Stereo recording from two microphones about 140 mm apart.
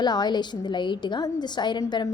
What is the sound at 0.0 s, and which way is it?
A woman's voice, 30° left (ahead or behind).